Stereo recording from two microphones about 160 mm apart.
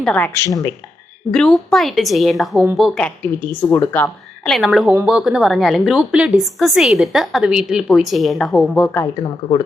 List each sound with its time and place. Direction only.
0.0 s speech: 10° left (ahead or behind)
1.3 s a woman's voice: centre (ahead or behind)
3.4 s a woman's voice: 10° left (ahead or behind)